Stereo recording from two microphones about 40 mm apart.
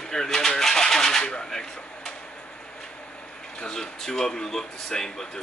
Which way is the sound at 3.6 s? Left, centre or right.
Centre.